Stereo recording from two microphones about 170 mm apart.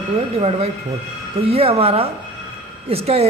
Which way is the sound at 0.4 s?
35° right (ahead or behind).